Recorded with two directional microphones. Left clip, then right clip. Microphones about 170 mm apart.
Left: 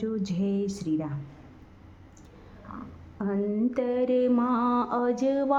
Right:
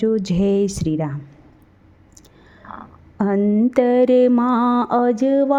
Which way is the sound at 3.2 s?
45° right (ahead or behind).